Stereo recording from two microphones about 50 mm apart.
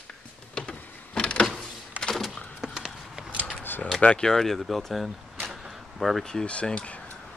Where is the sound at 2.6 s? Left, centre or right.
Centre.